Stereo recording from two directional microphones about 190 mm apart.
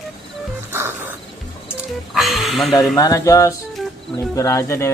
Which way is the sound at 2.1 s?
Centre (ahead or behind).